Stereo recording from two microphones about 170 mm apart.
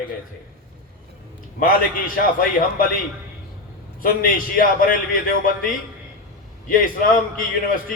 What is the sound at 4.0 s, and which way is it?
A man's voice, 55° left (ahead or behind).